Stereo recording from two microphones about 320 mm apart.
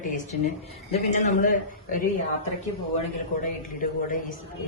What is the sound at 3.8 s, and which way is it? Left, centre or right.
Speech, left.